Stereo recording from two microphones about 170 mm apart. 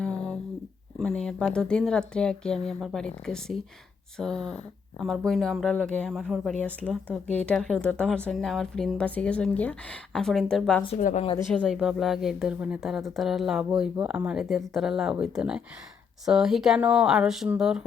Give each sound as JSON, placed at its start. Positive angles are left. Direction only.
{"t": 0.0, "sound": "a sound", "side_deg": 5}
{"t": 0.9, "sound": "speech", "side_deg": 5}
{"t": 10.9, "sound": "a woman's voice", "side_deg": 45}
{"t": 11.6, "sound": "speech", "side_deg": -5}